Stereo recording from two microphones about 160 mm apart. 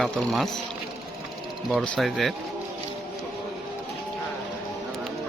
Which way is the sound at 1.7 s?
Centre (ahead or behind).